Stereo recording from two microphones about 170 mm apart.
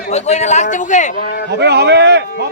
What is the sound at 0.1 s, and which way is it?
Speech, 40° left (ahead or behind).